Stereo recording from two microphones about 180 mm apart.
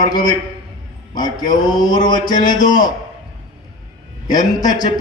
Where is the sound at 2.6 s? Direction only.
20° left (ahead or behind).